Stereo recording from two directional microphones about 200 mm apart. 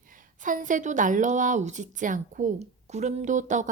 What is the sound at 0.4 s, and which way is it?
A woman's voice, 40° right (ahead or behind).